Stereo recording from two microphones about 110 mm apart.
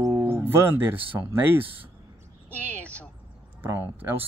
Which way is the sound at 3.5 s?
20° right (ahead or behind).